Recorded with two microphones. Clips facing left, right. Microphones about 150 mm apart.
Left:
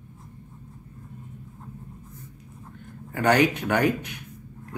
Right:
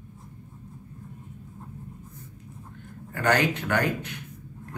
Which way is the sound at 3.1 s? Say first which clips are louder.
Left 3 dB; 15° left (ahead or behind).